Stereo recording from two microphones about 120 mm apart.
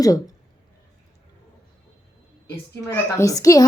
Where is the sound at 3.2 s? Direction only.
30° left (ahead or behind).